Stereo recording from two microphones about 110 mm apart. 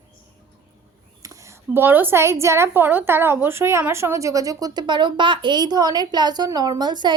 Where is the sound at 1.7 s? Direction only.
20° right (ahead or behind).